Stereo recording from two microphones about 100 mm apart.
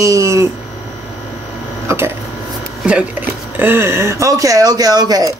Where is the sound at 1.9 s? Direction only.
25° right (ahead or behind).